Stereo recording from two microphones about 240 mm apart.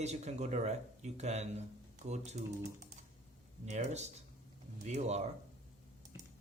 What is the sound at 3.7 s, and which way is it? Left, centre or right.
Speech, right.